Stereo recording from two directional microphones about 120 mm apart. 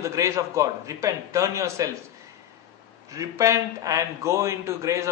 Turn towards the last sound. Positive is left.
turn(degrees=-25)  # may be behind; listen again after turning